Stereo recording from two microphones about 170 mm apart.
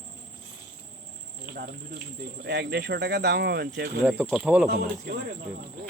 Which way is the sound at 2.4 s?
75° right (ahead or behind).